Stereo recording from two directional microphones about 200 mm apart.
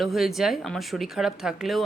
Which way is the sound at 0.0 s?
Centre (ahead or behind).